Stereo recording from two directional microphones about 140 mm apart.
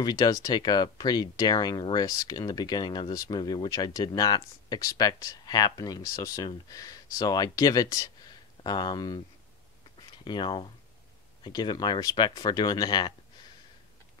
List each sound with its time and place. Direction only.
0.0 s speech: 25° left (ahead or behind)